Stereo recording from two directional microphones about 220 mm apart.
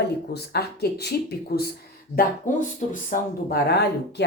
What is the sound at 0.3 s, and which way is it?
Speech, 45° left (ahead or behind).